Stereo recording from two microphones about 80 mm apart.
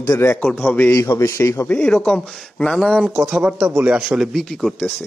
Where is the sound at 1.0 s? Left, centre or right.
Left.